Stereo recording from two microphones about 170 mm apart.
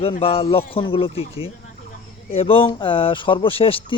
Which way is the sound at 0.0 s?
35° left (ahead or behind).